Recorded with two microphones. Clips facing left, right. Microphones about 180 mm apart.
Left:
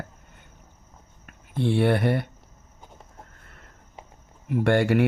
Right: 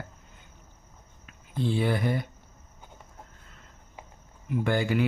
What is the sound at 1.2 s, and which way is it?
Speech, 70° left (ahead or behind).